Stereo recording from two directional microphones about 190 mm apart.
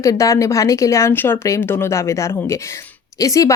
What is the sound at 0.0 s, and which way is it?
Speech, 15° left (ahead or behind).